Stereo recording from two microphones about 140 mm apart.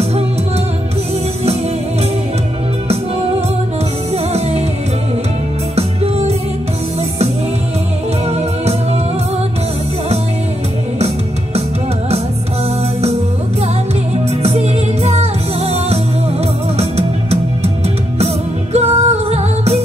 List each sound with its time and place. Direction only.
4.1 s music: 50° right (ahead or behind)
5.8 s music: 45° right (ahead or behind)
8.3 s music: 50° right (ahead or behind)
14.3 s music: 50° right (ahead or behind)